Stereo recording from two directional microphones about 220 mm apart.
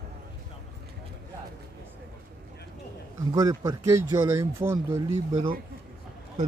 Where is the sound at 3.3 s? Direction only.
15° right (ahead or behind).